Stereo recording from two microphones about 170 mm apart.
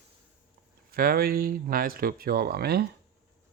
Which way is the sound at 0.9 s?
60° right (ahead or behind).